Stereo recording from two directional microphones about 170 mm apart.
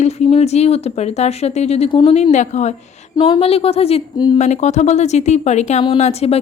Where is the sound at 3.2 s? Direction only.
30° left (ahead or behind).